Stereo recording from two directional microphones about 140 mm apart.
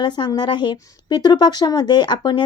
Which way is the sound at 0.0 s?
30° left (ahead or behind).